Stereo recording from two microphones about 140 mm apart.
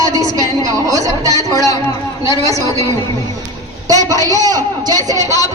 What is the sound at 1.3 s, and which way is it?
Speech, 25° left (ahead or behind).